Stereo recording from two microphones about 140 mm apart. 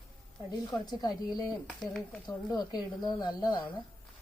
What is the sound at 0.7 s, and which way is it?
Speech, 30° left (ahead or behind).